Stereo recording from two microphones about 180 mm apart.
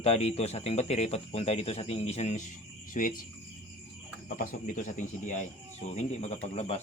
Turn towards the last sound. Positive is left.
turn(degrees=35)  # may be behind; listen again after turning